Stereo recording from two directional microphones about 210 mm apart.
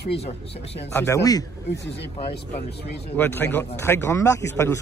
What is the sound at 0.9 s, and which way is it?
Speech, 15° left (ahead or behind).